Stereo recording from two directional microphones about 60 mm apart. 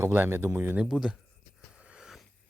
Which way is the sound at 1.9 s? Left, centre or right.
Centre.